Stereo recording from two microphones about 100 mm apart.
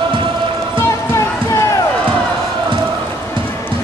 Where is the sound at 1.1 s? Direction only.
30° left (ahead or behind).